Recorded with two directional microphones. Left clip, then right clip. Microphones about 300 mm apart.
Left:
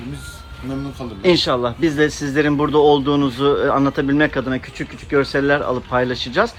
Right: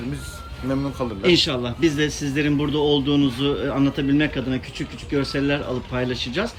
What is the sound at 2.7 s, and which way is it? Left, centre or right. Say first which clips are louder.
Speech: left 8 dB; centre.